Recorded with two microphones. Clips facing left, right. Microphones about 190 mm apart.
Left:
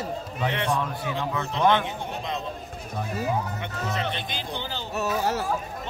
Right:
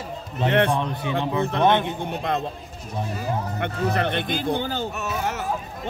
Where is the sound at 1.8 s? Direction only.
60° right (ahead or behind).